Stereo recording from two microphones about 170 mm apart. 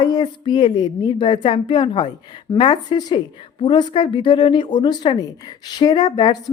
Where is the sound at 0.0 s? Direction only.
25° left (ahead or behind).